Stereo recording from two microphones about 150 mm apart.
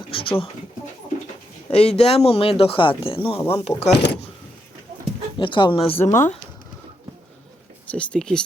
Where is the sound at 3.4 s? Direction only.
15° left (ahead or behind).